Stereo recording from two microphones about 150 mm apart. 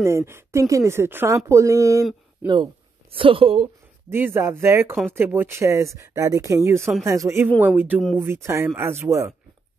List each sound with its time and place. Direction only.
0.0 s speech: 20° right (ahead or behind)
2.4 s speech: 30° right (ahead or behind)
4.1 s speech: 15° right (ahead or behind)